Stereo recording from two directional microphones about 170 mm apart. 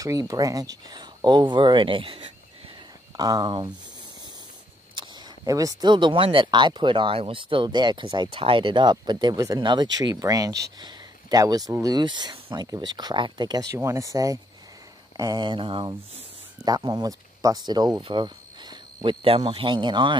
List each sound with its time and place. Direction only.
0.0 s speech: 20° right (ahead or behind)
4.9 s speech: 25° right (ahead or behind)
10.8 s a sound: 25° right (ahead or behind)
11.7 s speech: 20° right (ahead or behind)